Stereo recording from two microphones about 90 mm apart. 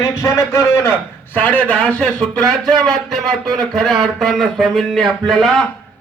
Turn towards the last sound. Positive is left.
turn(degrees=0)  # may be behind; listen again after turning